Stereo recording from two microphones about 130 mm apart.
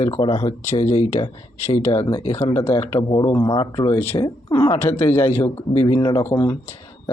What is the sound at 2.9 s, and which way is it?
Speech, 30° left (ahead or behind).